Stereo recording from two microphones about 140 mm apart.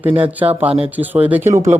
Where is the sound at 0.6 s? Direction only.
40° right (ahead or behind).